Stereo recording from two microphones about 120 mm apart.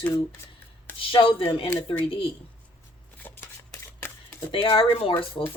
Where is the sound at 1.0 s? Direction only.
45° left (ahead or behind).